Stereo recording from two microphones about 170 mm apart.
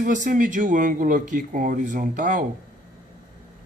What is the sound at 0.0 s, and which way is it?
Speech, 50° right (ahead or behind).